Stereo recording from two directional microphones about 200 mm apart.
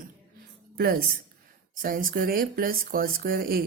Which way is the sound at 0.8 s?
50° right (ahead or behind).